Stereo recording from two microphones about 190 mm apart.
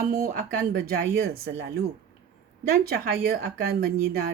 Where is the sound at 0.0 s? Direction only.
50° right (ahead or behind).